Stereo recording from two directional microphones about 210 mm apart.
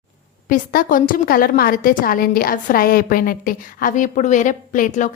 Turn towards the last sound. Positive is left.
turn(degrees=35)  # may be behind; listen again after turning